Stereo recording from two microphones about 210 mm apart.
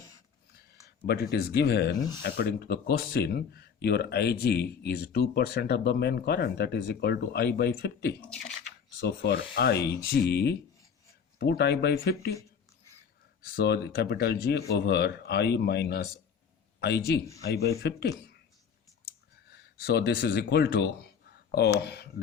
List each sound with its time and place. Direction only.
0.9 s speech: 50° left (ahead or behind)
8.2 s speech: 5° left (ahead or behind)
9.0 s speech: 50° left (ahead or behind)
13.7 s speech: 50° left (ahead or behind)
17.1 s speech: 50° left (ahead or behind)
19.8 s speech: 50° left (ahead or behind)